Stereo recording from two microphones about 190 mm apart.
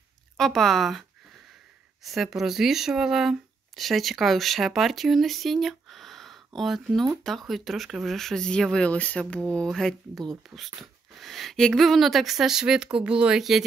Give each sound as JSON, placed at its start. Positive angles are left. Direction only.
{"t": 0.4, "sound": "speech", "side_deg": 0}
{"t": 2.0, "sound": "speech", "side_deg": 0}